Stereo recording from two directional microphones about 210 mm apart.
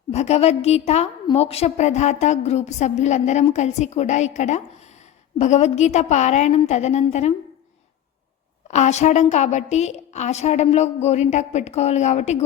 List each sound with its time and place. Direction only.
0.1 s a woman's voice: 30° left (ahead or behind)
8.6 s a woman's voice: 35° left (ahead or behind)